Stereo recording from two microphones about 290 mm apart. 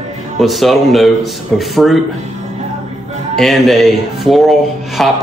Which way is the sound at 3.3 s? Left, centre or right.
Centre.